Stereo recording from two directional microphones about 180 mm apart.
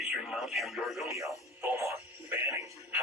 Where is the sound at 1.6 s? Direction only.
15° right (ahead or behind).